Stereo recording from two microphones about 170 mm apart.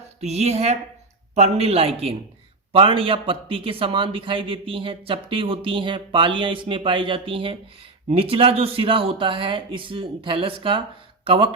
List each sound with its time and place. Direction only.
0.2 s a man's voice: 40° right (ahead or behind)